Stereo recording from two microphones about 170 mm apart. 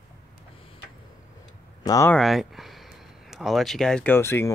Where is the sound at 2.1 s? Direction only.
Centre (ahead or behind).